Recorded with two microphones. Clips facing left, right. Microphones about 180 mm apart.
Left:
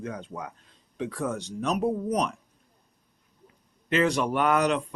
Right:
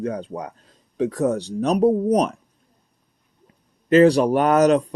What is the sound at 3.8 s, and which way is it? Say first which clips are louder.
Speech: right 10 dB; 35° right (ahead or behind).